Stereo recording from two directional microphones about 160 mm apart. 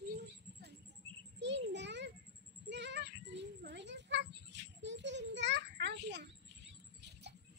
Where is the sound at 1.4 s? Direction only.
90° right.